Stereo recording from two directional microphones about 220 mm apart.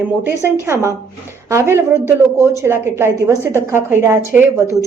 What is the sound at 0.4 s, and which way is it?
A woman's voice, 10° right (ahead or behind).